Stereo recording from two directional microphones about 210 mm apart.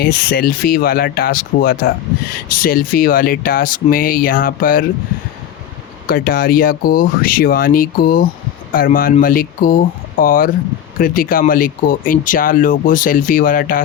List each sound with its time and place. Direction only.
0.0 s speech: 45° left (ahead or behind)
6.1 s speech: 45° left (ahead or behind)